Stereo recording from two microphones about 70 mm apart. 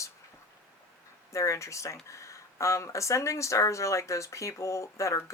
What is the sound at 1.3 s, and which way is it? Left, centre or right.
Speech, left.